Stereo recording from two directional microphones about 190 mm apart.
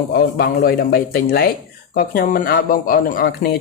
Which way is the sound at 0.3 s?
55° left (ahead or behind).